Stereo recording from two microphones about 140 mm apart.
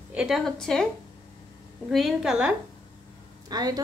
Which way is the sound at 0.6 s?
5° left (ahead or behind).